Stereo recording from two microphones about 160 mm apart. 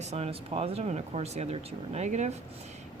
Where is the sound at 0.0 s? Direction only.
40° right (ahead or behind).